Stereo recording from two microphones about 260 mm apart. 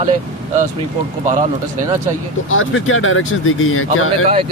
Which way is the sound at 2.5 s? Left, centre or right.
Left.